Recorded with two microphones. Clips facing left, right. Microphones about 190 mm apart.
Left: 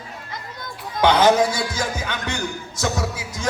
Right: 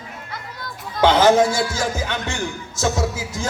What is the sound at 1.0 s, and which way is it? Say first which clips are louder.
A man's voice: right 2 dB; 25° right (ahead or behind).